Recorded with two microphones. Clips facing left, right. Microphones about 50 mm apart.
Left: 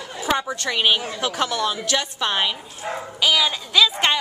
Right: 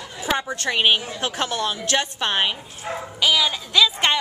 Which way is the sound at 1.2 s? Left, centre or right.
Right.